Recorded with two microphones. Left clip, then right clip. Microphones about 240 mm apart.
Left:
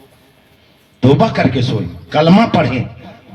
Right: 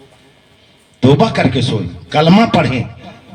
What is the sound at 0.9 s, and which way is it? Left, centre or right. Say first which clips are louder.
A man's voice: even; right.